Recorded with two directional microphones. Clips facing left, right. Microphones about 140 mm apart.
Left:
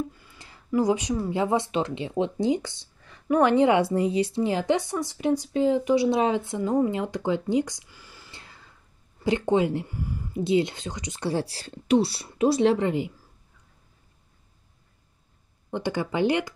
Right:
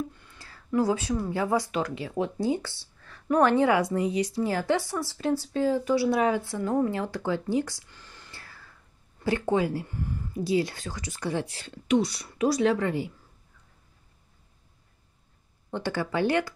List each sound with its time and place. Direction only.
0.4 s a sound: 20° left (ahead or behind)
0.7 s a woman's voice: 15° left (ahead or behind)
8.3 s whispering: 20° left (ahead or behind)
9.2 s a woman's voice: 20° left (ahead or behind)
9.8 s speech: 10° left (ahead or behind)
10.3 s a woman's voice: 25° left (ahead or behind)
15.7 s speech: 15° left (ahead or behind)